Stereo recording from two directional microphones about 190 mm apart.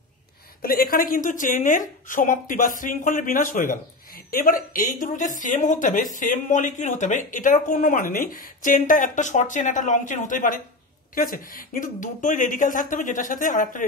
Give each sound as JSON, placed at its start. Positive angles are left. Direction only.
{"t": 0.6, "sound": "speech", "side_deg": 50}